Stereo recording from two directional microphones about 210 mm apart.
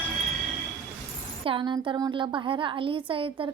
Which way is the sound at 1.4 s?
25° right (ahead or behind).